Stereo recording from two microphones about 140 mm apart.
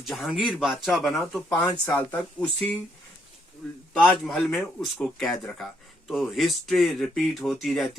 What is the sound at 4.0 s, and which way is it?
A man's voice, centre (ahead or behind).